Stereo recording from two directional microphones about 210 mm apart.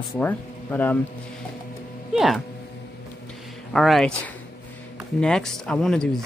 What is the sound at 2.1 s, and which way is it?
Speech, centre (ahead or behind).